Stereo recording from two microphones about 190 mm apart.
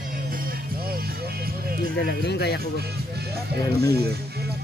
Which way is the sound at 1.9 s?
60° left (ahead or behind).